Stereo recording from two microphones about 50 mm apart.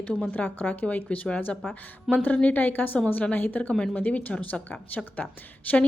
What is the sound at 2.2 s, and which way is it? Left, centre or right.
A woman's voice, left.